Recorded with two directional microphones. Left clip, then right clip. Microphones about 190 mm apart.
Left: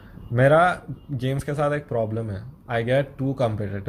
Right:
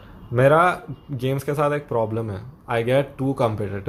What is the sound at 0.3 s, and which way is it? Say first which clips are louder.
Speech: right 1 dB; 10° right (ahead or behind).